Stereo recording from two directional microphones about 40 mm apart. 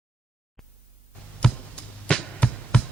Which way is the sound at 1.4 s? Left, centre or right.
Left.